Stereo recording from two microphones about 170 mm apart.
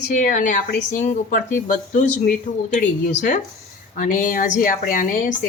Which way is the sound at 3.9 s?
50° left (ahead or behind).